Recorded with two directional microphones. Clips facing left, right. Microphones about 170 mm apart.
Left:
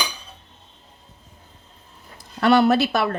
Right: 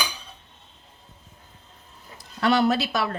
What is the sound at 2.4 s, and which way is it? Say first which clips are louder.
Speech: left 5 dB; 60° left (ahead or behind).